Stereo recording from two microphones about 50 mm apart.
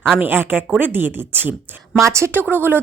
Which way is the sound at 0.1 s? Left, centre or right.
Right.